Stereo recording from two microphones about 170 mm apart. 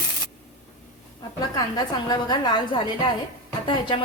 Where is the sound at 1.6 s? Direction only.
25° left (ahead or behind).